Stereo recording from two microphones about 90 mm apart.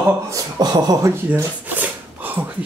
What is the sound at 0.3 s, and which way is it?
Speech, 50° right (ahead or behind).